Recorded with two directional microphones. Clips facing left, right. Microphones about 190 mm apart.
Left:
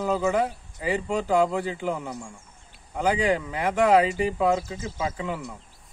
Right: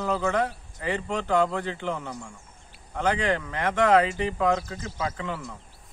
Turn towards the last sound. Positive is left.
turn(degrees=10)  # may be behind; listen again after turning